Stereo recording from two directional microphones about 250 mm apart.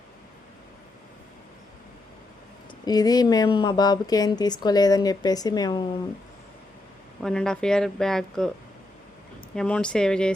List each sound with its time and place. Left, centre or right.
2.8 s speech: centre
7.2 s speech: centre
9.6 s speech: centre